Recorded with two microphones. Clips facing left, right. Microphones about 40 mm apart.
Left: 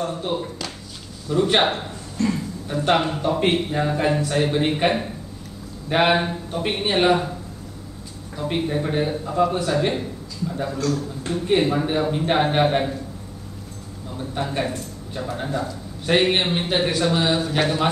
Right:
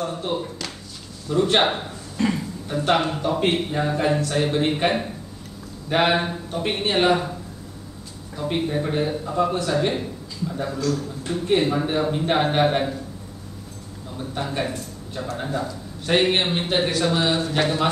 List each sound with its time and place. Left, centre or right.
0.0 s a man's voice: centre
2.1 s a sound: right
2.7 s a man's voice: centre
8.4 s a man's voice: centre
14.1 s a man's voice: centre